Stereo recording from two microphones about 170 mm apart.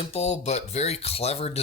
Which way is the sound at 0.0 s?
40° left (ahead or behind).